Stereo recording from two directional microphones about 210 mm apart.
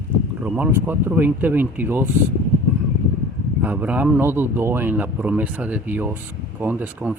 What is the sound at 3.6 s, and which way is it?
Speech, 10° right (ahead or behind).